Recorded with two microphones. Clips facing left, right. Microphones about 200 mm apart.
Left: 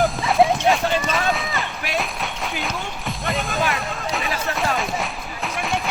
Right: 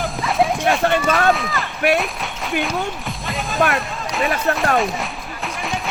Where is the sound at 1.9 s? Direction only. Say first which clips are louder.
Right 5 dB; centre (ahead or behind).